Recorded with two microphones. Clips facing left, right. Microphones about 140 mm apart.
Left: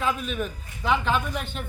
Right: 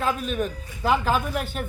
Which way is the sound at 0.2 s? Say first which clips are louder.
Right 3 dB; 40° right (ahead or behind).